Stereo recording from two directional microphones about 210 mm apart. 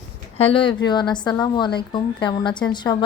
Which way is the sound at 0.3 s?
25° left (ahead or behind).